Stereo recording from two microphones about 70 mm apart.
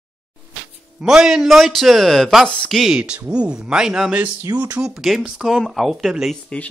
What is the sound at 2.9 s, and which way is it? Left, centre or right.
Speech, centre.